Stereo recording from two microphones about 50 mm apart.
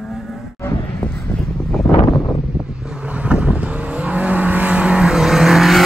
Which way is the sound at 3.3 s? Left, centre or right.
Right.